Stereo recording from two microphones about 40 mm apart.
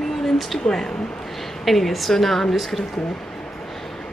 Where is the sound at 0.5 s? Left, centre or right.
Centre.